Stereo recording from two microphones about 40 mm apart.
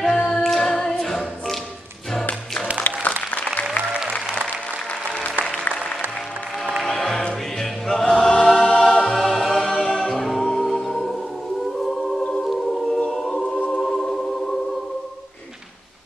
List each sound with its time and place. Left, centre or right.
0.0 s a capella: centre
2.9 s applause: left
5.4 s applause: left
6.8 s music: centre
7.5 s choir: centre
10.4 s music: centre
12.2 s choir: left
13.7 s music: centre